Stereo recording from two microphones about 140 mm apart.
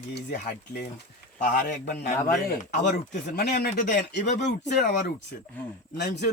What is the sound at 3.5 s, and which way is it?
Speech, 60° left (ahead or behind).